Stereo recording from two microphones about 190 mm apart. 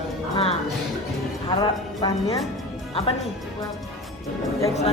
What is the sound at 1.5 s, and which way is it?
Music, 25° left (ahead or behind).